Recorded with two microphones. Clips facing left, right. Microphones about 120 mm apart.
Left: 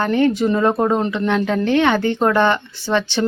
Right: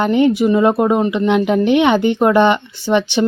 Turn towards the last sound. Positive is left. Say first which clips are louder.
# right 4 dB
turn(degrees=-15)  # may be behind; listen again after turning